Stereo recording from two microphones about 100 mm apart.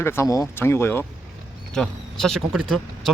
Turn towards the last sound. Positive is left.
turn(degrees=0)  # may be behind; listen again after turning